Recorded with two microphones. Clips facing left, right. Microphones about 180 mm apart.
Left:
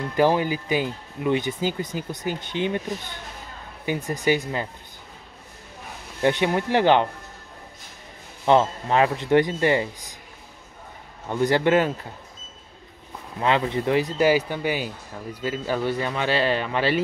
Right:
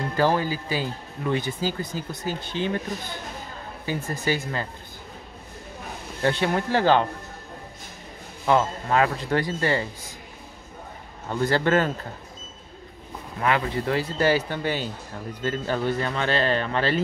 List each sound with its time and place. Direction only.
0.1 s speech: 15° left (ahead or behind)
3.8 s speech: 20° left (ahead or behind)
6.2 s speech: 15° left (ahead or behind)
8.5 s speech: 25° left (ahead or behind)
11.2 s speech: 15° left (ahead or behind)
13.4 s speech: 20° left (ahead or behind)